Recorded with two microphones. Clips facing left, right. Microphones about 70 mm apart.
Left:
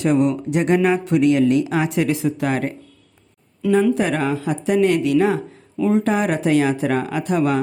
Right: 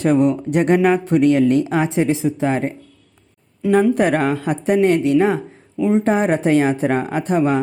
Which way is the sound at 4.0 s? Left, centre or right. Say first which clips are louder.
Right 3 dB; right.